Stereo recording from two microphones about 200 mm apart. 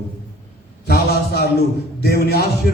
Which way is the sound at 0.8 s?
50° left (ahead or behind).